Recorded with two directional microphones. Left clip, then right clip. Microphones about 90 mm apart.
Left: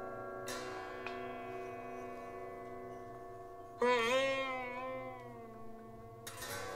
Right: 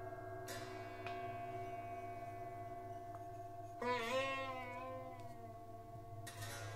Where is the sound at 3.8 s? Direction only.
40° left (ahead or behind).